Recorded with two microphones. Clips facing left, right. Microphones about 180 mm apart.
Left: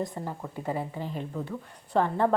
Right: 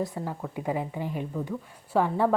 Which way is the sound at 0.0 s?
5° right (ahead or behind).